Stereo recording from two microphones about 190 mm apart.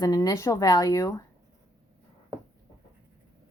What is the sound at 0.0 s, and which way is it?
Speech, 20° left (ahead or behind).